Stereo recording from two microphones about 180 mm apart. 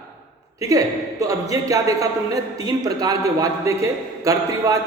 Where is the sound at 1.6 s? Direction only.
20° right (ahead or behind).